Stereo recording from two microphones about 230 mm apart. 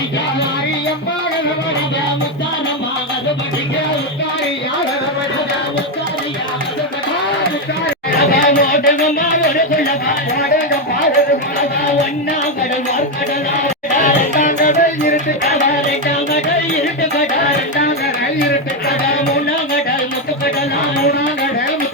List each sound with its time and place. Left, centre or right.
8.4 s music: left
13.9 s music: left